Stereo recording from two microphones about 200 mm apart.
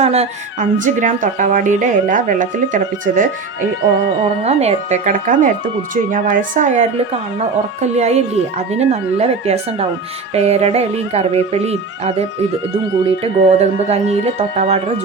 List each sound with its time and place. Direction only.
0.0 s speech: 30° right (ahead or behind)
13.2 s speech: 35° right (ahead or behind)